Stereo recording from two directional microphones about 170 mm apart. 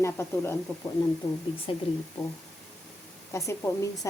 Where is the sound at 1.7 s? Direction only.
30° left (ahead or behind).